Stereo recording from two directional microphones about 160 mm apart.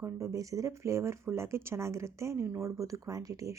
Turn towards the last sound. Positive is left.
turn(degrees=-20)  # may be behind; listen again after turning